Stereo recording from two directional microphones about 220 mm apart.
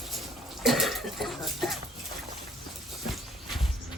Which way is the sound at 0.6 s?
Centre (ahead or behind).